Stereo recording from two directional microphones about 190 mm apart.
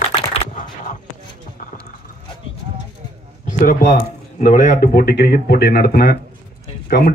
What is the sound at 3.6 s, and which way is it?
Speech, 50° left (ahead or behind).